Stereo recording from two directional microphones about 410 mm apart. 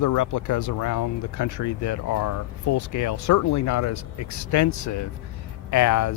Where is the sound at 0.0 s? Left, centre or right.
Left.